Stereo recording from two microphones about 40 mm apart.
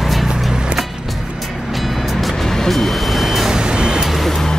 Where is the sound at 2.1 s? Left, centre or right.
Centre.